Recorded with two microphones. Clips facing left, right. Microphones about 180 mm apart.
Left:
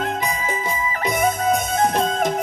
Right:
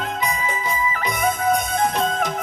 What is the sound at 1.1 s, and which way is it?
Music, 45° left (ahead or behind).